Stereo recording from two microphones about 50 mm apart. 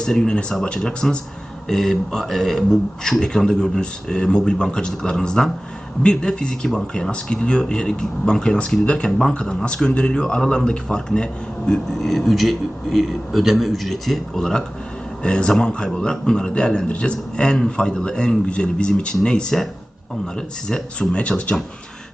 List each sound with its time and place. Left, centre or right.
0.0 s speech: centre